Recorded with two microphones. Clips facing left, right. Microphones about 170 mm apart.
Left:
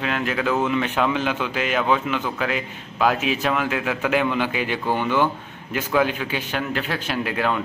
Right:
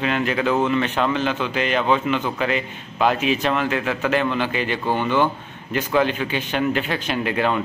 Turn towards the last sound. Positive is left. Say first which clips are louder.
# right 2 dB
turn(degrees=0)  # may be behind; listen again after turning